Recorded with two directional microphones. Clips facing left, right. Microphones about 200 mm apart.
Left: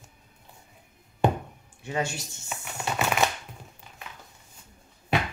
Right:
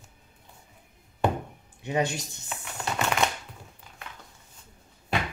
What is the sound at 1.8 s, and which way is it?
Speech, 20° right (ahead or behind).